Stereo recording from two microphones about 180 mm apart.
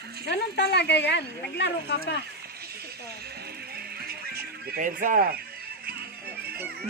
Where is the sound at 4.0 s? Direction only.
60° right (ahead or behind).